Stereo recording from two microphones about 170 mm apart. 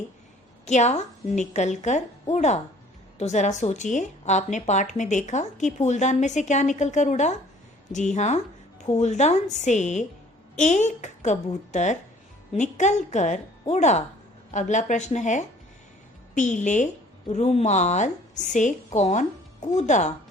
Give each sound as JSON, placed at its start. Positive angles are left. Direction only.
{"t": 0.6, "sound": "a woman's voice", "side_deg": 45}